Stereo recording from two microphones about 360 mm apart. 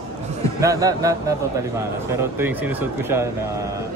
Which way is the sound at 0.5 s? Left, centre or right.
Centre.